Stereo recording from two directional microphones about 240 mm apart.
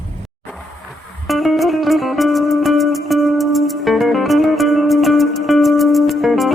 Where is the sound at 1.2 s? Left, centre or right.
Centre.